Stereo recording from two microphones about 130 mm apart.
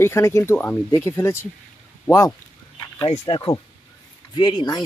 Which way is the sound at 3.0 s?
45° left (ahead or behind).